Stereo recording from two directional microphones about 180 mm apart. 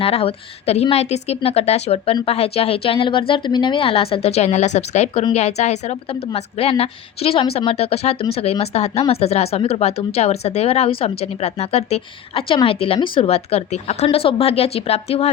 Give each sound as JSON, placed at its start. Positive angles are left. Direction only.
{"t": 0.0, "sound": "a woman's voice", "side_deg": 35}